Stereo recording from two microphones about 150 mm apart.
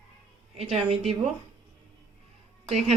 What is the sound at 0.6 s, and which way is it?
Speech, 45° right (ahead or behind).